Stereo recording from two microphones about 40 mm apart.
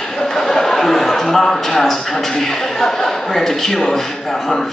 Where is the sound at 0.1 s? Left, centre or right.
Centre.